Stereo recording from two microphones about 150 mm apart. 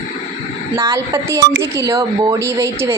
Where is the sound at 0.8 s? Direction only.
25° right (ahead or behind).